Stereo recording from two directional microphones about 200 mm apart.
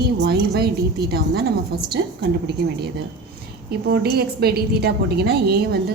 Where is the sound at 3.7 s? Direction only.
50° right (ahead or behind).